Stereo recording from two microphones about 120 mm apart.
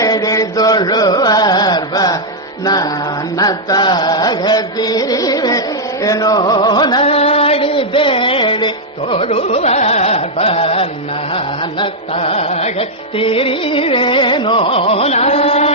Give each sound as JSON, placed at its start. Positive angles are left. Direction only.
{"t": 0.0, "sound": "carnatic music", "side_deg": 30}
{"t": 2.6, "sound": "music", "side_deg": 35}
{"t": 7.0, "sound": "music", "side_deg": 55}
{"t": 9.1, "sound": "carnatic music", "side_deg": 60}
{"t": 13.1, "sound": "music", "side_deg": 50}